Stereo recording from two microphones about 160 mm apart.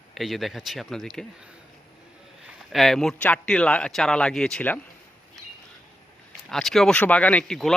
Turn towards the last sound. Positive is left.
turn(degrees=5)  # may be behind; listen again after turning